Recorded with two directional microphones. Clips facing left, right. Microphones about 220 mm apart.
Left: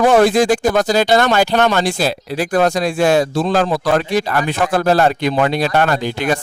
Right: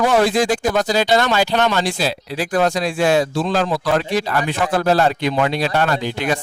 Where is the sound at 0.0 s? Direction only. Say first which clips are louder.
Left 4 dB; 50° left (ahead or behind).